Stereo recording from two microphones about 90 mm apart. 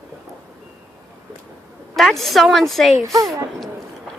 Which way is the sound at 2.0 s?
Centre (ahead or behind).